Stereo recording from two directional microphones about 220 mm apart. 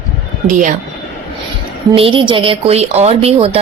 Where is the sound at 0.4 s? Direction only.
35° right (ahead or behind).